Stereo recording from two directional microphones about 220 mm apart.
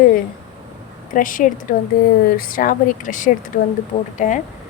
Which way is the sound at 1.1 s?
35° left (ahead or behind).